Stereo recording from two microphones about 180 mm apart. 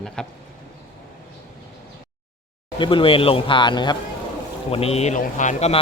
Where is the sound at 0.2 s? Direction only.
5° left (ahead or behind).